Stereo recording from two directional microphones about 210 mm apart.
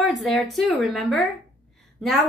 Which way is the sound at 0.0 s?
Centre (ahead or behind).